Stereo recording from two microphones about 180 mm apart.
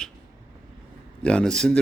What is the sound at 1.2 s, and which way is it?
Speech, 5° left (ahead or behind).